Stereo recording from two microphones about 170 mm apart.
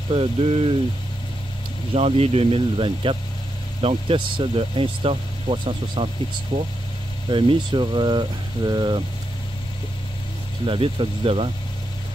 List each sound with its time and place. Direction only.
0.1 s speech: 35° right (ahead or behind)
2.0 s speech: 35° right (ahead or behind)
7.2 s speech: 30° right (ahead or behind)
10.6 s speech: 30° right (ahead or behind)